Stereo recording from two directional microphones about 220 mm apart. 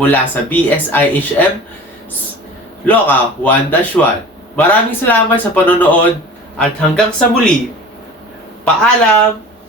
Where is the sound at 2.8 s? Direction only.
10° left (ahead or behind).